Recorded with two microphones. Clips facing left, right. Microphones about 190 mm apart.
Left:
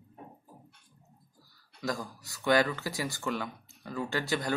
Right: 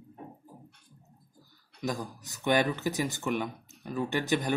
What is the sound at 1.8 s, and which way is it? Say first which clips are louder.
Speech: right 1 dB; 20° right (ahead or behind).